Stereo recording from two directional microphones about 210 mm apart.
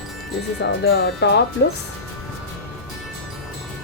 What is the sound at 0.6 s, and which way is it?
Speech, 55° left (ahead or behind).